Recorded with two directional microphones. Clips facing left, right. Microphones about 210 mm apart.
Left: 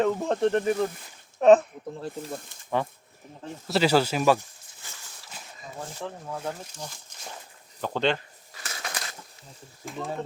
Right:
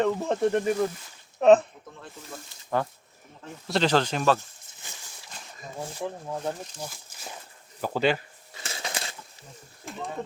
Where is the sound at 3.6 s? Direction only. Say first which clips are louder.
Left 2 dB; 5° left (ahead or behind).